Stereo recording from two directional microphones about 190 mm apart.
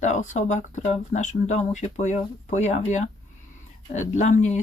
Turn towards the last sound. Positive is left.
turn(degrees=40)  # may be behind; listen again after turning